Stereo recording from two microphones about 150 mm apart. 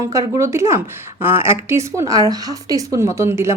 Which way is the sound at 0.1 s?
20° right (ahead or behind).